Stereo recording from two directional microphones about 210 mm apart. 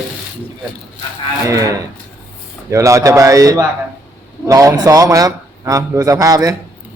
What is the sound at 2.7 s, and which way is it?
A man's voice, 15° right (ahead or behind).